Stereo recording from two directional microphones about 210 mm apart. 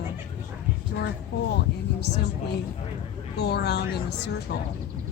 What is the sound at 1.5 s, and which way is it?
Speech, 55° left (ahead or behind).